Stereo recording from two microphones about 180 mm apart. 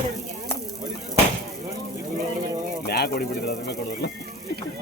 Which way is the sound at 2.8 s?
60° left (ahead or behind).